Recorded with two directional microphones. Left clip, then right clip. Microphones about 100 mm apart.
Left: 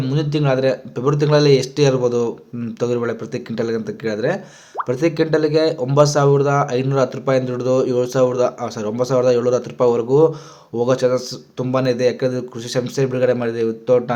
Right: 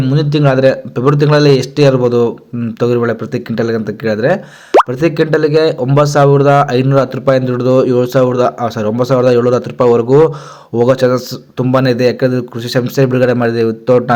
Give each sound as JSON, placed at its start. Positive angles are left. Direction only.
{"t": 0.1, "sound": "speech", "side_deg": -35}